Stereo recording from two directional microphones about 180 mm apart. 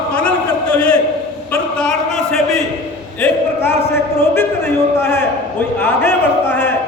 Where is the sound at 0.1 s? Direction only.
5° left (ahead or behind).